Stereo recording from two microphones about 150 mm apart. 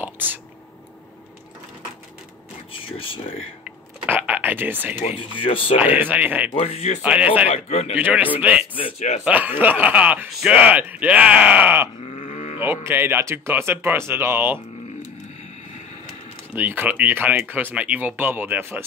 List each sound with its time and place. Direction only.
0.0 s whispering: 10° right (ahead or behind)
2.9 s speech: 35° left (ahead or behind)
3.6 s a sound: 10° right (ahead or behind)
5.0 s speech: 35° left (ahead or behind)
5.8 s speech: 15° right (ahead or behind)
6.5 s a man's voice: 40° left (ahead or behind)
7.0 s speech: 10° right (ahead or behind)
7.4 s a man's voice: 45° left (ahead or behind)
8.0 s speech: 10° right (ahead or behind)
12.1 s livestock: 50° left (ahead or behind)
12.5 s speech: 15° right (ahead or behind)
16.5 s speech: 10° right (ahead or behind)